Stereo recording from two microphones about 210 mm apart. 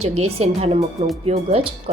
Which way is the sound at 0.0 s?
30° right (ahead or behind).